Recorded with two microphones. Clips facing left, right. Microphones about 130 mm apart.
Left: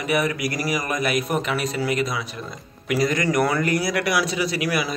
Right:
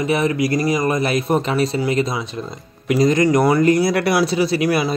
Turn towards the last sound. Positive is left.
turn(degrees=-30)  # may be behind; listen again after turning